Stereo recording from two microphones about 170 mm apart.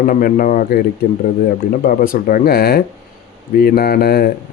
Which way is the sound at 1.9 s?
55° left (ahead or behind).